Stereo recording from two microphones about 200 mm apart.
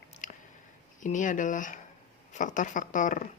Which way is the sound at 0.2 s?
40° left (ahead or behind).